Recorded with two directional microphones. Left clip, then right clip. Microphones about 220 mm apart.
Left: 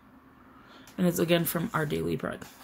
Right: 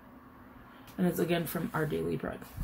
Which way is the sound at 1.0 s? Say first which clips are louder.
Left 5 dB; 50° left (ahead or behind).